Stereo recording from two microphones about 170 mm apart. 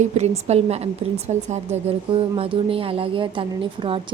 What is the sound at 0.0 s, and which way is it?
A woman's voice, 40° right (ahead or behind).